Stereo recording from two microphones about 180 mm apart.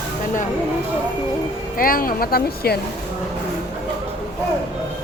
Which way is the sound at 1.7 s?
50° left (ahead or behind).